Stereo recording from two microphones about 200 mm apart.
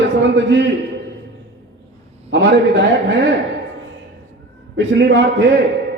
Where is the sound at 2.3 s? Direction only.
65° right (ahead or behind).